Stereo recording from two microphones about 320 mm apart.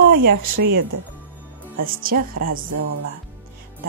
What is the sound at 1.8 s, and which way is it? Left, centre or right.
Speech, right.